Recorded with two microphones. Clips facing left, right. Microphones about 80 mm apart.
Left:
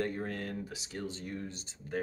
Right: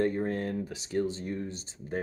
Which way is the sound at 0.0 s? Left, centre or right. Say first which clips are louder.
Right 7 dB; right.